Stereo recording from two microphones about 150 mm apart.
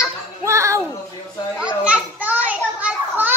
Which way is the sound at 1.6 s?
10° right (ahead or behind).